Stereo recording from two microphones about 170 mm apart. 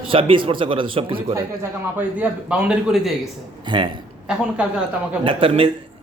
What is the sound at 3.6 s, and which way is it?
Speech, 30° right (ahead or behind).